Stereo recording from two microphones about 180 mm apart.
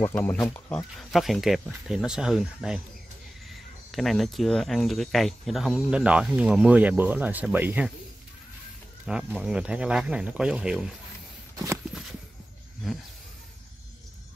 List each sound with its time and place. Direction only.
0.0 s speech: 10° left (ahead or behind)
0.7 s speech: centre (ahead or behind)
3.9 s speech: centre (ahead or behind)
9.0 s speech: 5° right (ahead or behind)
11.5 s a sound: 15° right (ahead or behind)